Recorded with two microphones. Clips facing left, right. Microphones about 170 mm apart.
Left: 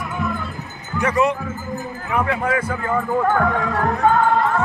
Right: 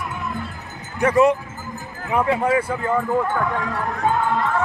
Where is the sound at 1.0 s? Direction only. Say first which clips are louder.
Right 3 dB; 45° right (ahead or behind).